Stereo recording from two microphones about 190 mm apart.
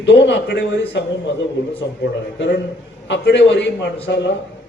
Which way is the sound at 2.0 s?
70° left (ahead or behind).